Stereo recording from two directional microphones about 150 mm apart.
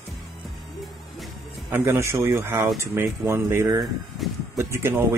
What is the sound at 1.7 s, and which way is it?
Speech, 15° right (ahead or behind).